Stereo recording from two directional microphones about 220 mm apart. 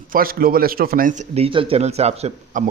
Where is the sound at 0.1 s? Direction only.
40° right (ahead or behind).